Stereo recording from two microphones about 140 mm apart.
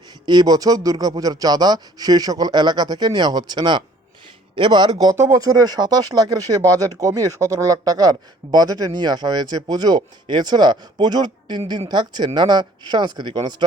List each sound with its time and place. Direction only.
0.3 s speech: 30° right (ahead or behind)